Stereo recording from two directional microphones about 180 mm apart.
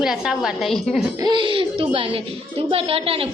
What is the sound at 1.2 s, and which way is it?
A woman's voice, 25° right (ahead or behind).